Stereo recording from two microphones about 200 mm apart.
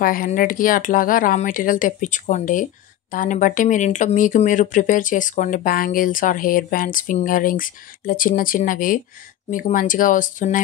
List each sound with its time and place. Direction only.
0.0 s speech: 45° left (ahead or behind)